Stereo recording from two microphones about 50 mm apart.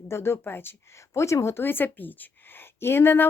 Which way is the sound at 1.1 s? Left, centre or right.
Left.